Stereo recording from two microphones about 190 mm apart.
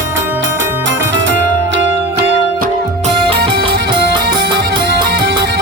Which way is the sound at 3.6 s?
25° right (ahead or behind).